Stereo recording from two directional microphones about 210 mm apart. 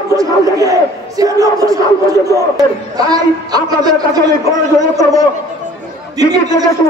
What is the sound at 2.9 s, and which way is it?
A woman's voice, 20° right (ahead or behind).